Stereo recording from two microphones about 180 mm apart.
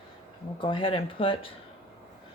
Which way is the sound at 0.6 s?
30° left (ahead or behind).